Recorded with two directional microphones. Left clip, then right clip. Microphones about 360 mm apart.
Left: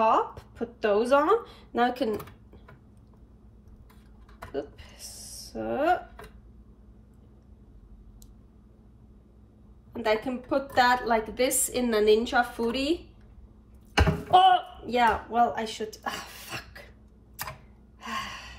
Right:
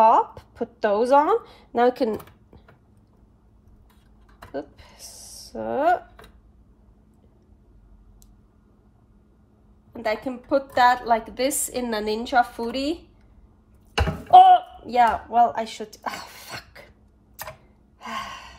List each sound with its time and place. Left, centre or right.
0.0 s a woman's voice: centre
4.5 s a sound: centre
9.9 s a woman's voice: centre
14.3 s speech: centre
18.0 s gasp: centre